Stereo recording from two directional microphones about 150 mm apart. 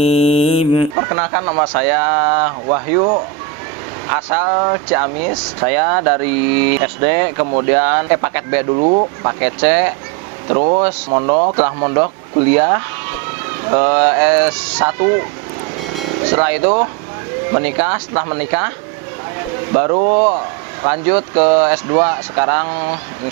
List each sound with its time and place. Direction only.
0.0 s mantra: 40° left (ahead or behind)
0.9 s speech: 20° right (ahead or behind)
8.7 s speech: 30° right (ahead or behind)
9.4 s speech: 10° right (ahead or behind)
10.5 s speech: 30° right (ahead or behind)
17.5 s speech: 15° right (ahead or behind)
19.7 s speech: 25° right (ahead or behind)